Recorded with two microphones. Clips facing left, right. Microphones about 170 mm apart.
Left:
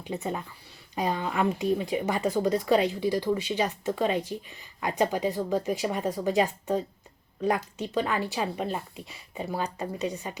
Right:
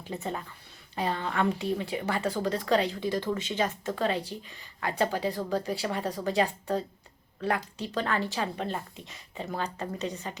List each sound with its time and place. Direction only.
0.1 s a woman's voice: 20° left (ahead or behind)
7.9 s a woman's voice: 10° left (ahead or behind)